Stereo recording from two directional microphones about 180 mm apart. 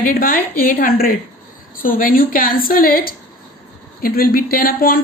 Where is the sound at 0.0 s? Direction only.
50° left (ahead or behind).